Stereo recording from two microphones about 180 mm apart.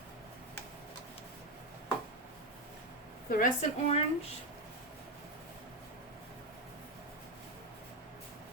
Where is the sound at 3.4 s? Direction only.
40° left (ahead or behind).